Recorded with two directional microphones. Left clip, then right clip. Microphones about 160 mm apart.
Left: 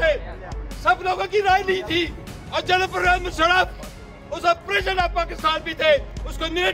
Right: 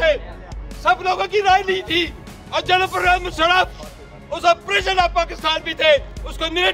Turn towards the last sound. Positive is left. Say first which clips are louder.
# right 4 dB
turn(degrees=-20)  # may be behind; listen again after turning